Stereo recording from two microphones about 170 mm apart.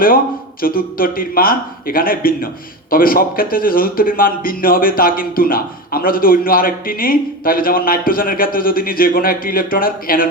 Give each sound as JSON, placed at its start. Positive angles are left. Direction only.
{"t": 0.6, "sound": "a man's voice", "side_deg": 60}